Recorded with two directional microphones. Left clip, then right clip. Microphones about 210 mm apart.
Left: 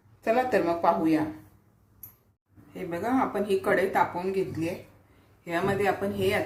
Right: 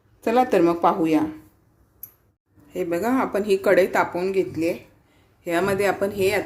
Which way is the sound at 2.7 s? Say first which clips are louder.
Right 6 dB; 55° right (ahead or behind).